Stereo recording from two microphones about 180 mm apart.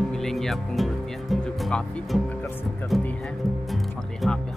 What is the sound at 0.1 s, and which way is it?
Speech, centre (ahead or behind).